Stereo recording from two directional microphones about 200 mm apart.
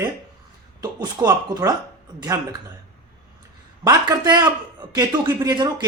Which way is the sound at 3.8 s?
20° right (ahead or behind).